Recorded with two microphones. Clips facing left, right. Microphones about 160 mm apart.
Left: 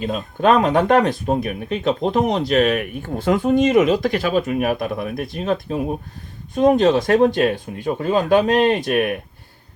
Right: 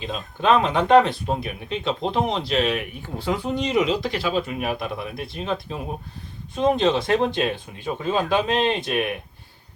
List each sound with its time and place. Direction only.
0.0 s speech: 50° left (ahead or behind)